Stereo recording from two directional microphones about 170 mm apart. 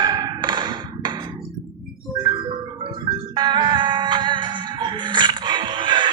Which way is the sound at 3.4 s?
25° right (ahead or behind).